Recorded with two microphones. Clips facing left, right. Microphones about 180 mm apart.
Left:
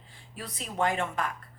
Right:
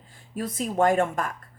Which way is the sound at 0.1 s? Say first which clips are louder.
Right 11 dB; 45° right (ahead or behind).